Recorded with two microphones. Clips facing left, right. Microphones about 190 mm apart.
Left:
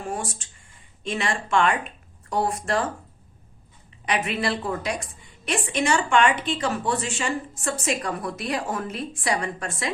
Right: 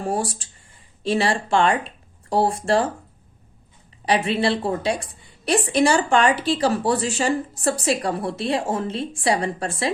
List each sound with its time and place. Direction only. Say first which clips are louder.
0.0 s a woman's voice: right 6 dB; 35° right (ahead or behind)
4.0 s a woman's voice: right 5 dB; 30° right (ahead or behind)